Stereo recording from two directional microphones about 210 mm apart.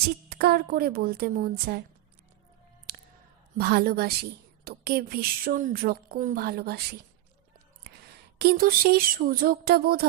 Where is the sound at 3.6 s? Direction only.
50° right (ahead or behind).